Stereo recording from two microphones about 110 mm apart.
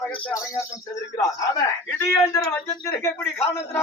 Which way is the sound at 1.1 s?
30° left (ahead or behind).